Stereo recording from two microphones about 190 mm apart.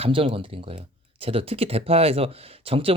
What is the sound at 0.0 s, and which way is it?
Speech, 30° right (ahead or behind).